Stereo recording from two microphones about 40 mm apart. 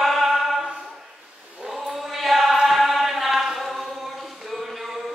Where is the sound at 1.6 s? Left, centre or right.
Centre.